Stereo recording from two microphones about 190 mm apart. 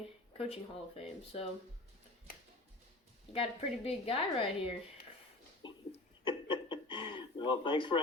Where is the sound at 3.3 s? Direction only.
30° left (ahead or behind).